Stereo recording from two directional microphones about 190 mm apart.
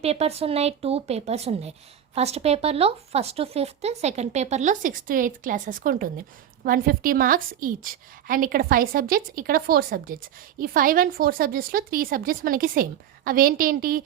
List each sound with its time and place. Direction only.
0.0 s a woman's voice: 35° right (ahead or behind); by 14.0 s 50° right (ahead or behind)